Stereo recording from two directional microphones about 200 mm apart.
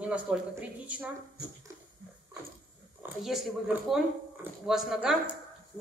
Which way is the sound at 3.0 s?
Centre (ahead or behind).